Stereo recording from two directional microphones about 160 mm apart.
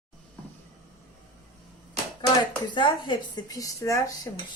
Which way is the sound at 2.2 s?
30° left (ahead or behind).